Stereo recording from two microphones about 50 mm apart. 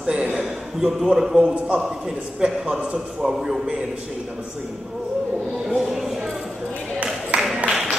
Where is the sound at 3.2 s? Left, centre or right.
Centre.